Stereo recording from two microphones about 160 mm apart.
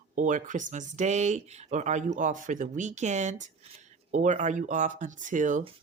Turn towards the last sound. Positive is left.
turn(degrees=-55)  # may be behind; listen again after turning